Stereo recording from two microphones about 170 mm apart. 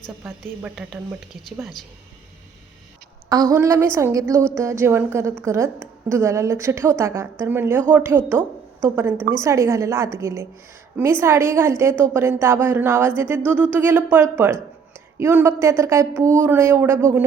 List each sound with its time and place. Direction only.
0.3 s a woman's voice: 5° right (ahead or behind)
3.2 s a woman's voice: 20° right (ahead or behind)